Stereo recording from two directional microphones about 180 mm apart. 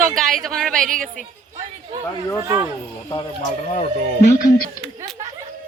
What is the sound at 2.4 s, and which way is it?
Speech, 15° right (ahead or behind).